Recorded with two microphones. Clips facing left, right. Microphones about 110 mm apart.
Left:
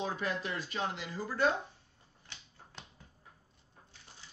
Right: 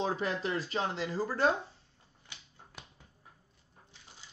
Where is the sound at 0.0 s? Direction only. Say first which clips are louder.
Right 3 dB; 30° right (ahead or behind).